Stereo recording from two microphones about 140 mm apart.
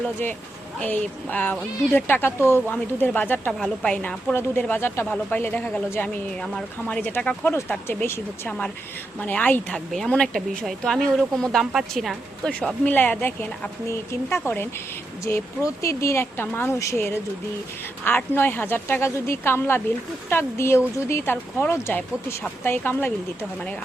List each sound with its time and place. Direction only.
0.8 s speech: 10° left (ahead or behind)